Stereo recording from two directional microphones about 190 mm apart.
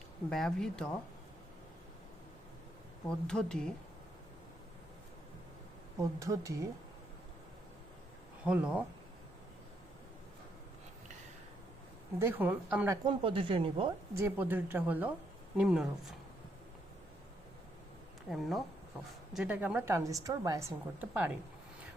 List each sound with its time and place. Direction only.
0.3 s speech: 5° left (ahead or behind)
3.1 s speech: 5° left (ahead or behind)
6.0 s a woman's voice: 15° right (ahead or behind)
8.4 s speech: 5° right (ahead or behind)
12.2 s a woman's voice: 10° right (ahead or behind)
13.1 s a woman's voice: 25° right (ahead or behind)
14.1 s a woman's voice: 15° right (ahead or behind)
18.3 s a woman's voice: centre (ahead or behind)